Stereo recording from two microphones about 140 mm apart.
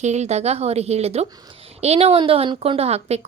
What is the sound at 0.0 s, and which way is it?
A woman's voice, 55° right (ahead or behind).